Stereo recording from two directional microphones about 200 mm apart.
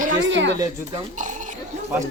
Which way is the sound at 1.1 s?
40° right (ahead or behind).